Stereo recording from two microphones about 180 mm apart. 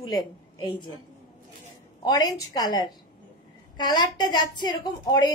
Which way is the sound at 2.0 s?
20° left (ahead or behind).